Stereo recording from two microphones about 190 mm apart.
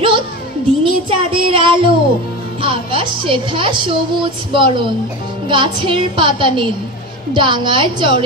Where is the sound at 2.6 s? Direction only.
25° right (ahead or behind).